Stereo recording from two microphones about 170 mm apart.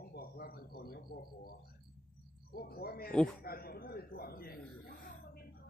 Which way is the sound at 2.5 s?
60° left (ahead or behind).